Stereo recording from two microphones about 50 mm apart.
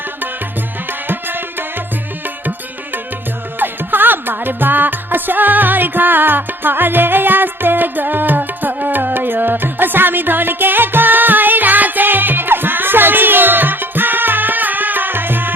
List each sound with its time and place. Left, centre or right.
0.9 s tabla: right
2.4 s music: right